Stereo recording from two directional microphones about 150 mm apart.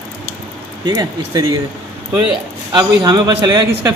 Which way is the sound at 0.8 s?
25° right (ahead or behind).